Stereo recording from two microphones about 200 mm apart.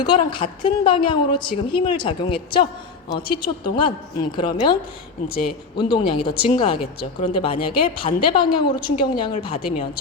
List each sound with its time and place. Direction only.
0.0 s a woman's voice: 25° left (ahead or behind)